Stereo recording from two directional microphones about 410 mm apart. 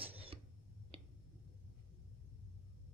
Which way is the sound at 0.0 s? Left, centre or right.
Centre.